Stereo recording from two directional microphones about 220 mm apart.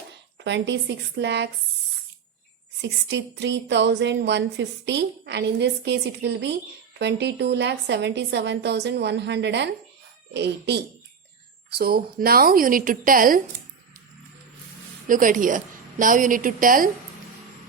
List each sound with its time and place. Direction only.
0.3 s a woman's voice: 50° right (ahead or behind)
3.1 s a woman's voice: 55° right (ahead or behind)
15.0 s a woman's voice: 40° right (ahead or behind)